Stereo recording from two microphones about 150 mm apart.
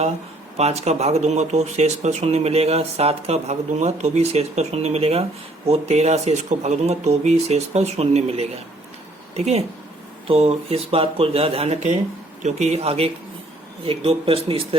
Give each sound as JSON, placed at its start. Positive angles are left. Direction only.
{"t": 0.5, "sound": "speech", "side_deg": -45}